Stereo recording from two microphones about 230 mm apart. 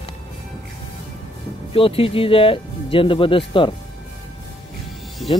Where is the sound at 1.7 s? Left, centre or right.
Left.